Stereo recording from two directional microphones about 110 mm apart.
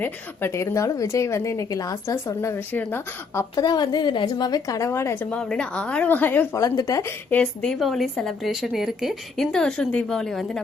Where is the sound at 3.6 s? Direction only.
40° left (ahead or behind); by 6.5 s 15° left (ahead or behind).